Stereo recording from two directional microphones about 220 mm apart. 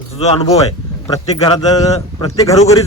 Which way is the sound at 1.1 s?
20° left (ahead or behind).